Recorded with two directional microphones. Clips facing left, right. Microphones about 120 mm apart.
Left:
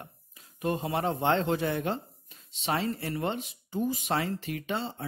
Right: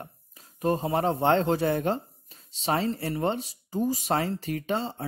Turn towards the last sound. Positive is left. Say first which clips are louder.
# right 4 dB
turn(degrees=-40)  # may be behind; listen again after turning